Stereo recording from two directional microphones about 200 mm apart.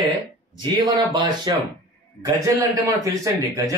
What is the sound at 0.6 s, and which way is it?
A man's voice, 25° right (ahead or behind).